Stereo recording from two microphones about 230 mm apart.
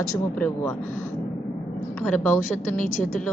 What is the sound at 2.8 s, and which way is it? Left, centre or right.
Speech, left.